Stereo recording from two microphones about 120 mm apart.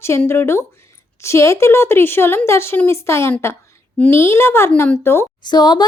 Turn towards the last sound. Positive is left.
turn(degrees=35)  # may be behind; listen again after turning